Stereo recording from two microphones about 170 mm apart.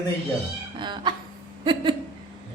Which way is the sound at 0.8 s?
25° right (ahead or behind).